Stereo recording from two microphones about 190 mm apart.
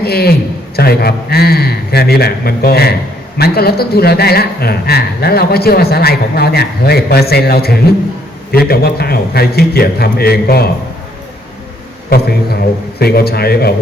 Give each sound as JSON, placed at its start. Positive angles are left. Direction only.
{"t": 0.0, "sound": "a man's voice", "side_deg": 55}
{"t": 13.0, "sound": "a man's voice", "side_deg": 55}